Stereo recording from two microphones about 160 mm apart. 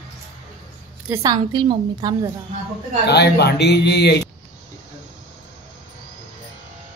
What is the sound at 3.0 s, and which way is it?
Speech, 90° left.